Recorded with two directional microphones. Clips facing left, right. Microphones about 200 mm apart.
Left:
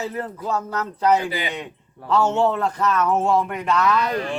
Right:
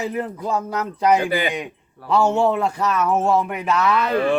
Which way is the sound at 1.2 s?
55° right (ahead or behind).